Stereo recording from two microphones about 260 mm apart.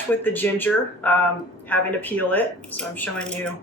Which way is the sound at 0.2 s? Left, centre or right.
Centre.